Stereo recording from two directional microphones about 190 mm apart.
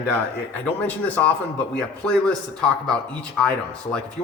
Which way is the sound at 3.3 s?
5° left (ahead or behind).